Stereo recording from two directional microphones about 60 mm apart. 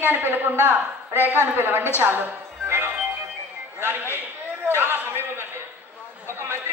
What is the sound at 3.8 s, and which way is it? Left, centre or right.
A woman's voice, right.